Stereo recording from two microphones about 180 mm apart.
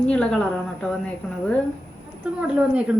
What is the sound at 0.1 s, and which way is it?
Speech, 5° left (ahead or behind).